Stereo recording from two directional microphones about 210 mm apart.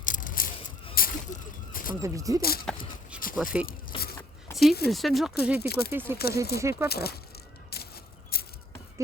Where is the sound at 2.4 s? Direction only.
45° left (ahead or behind).